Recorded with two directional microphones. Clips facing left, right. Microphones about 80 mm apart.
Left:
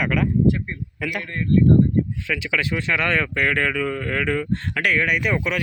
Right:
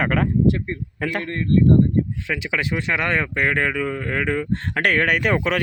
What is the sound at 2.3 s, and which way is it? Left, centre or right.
Speech, right.